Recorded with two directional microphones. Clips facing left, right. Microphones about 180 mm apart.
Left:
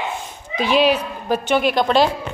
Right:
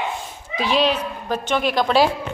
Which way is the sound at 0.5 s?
Centre (ahead or behind).